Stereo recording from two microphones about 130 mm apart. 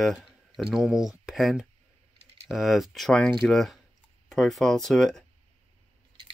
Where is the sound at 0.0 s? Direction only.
Centre (ahead or behind).